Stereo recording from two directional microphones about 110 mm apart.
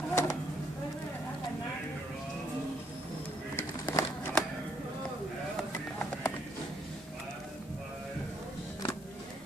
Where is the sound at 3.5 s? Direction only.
20° left (ahead or behind).